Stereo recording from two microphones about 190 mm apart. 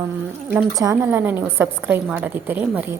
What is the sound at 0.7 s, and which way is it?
A woman's voice, 15° right (ahead or behind).